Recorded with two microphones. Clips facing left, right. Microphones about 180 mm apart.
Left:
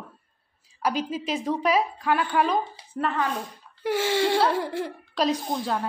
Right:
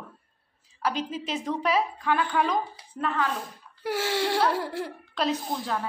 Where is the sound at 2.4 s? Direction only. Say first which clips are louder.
Left 2 dB; 25° left (ahead or behind).